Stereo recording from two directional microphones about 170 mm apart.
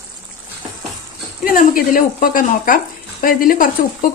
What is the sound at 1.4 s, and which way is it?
Speech, 55° left (ahead or behind).